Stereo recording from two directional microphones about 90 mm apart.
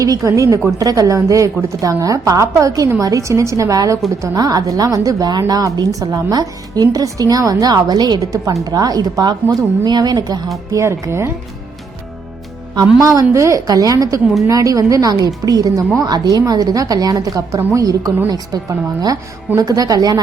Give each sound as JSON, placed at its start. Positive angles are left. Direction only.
{"t": 0.0, "sound": "a woman's voice", "side_deg": -35}
{"t": 10.7, "sound": "a woman's voice", "side_deg": -35}
{"t": 12.7, "sound": "a woman's voice", "side_deg": -45}
{"t": 19.5, "sound": "a woman's voice", "side_deg": -40}